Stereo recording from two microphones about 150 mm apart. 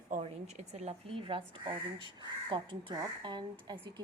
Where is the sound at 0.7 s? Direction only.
45° right (ahead or behind).